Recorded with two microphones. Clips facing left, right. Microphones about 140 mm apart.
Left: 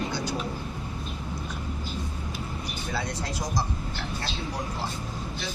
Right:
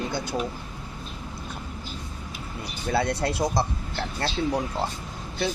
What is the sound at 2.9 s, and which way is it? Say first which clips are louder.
Speech: right 9 dB; 65° right (ahead or behind).